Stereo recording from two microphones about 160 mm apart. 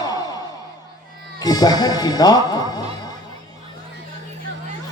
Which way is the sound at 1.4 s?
25° left (ahead or behind).